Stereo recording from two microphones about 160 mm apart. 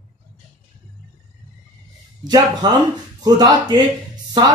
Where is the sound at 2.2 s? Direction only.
25° right (ahead or behind).